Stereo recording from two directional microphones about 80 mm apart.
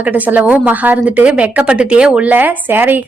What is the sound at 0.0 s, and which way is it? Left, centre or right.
A woman's voice, centre.